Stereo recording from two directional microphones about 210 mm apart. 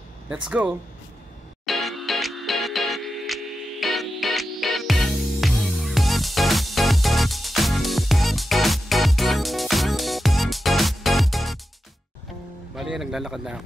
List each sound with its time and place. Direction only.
0.5 s speech: 5° right (ahead or behind)
1.7 s music: centre (ahead or behind)
12.7 s speech: centre (ahead or behind)